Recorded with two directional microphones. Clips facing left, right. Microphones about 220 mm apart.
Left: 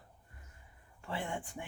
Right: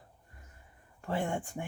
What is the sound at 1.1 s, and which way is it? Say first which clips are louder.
Speech: right 6 dB; 45° right (ahead or behind).